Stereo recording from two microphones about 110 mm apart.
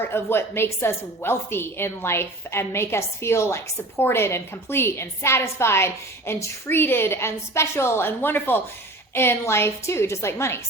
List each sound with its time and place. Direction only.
0.0 s a woman's voice: 20° left (ahead or behind)